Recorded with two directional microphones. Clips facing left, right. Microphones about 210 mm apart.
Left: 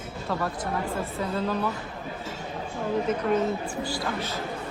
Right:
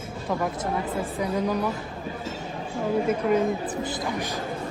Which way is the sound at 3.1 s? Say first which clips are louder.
Right 2 dB; 10° right (ahead or behind).